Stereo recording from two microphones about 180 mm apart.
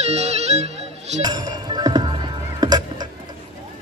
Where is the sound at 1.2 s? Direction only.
25° right (ahead or behind).